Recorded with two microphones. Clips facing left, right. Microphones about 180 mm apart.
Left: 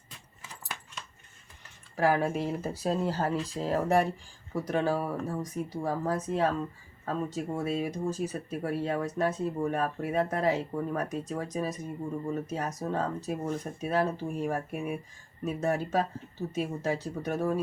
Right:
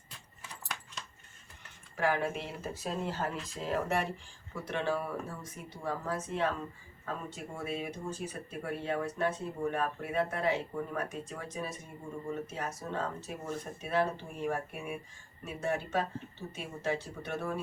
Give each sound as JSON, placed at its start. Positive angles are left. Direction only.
{"t": 2.0, "sound": "speech", "side_deg": 35}